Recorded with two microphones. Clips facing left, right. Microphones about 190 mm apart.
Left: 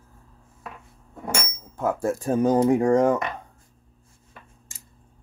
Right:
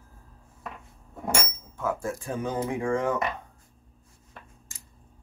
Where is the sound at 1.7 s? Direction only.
40° left (ahead or behind).